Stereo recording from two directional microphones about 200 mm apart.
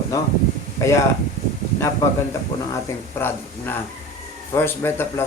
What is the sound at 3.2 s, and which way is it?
Speech, 10° left (ahead or behind).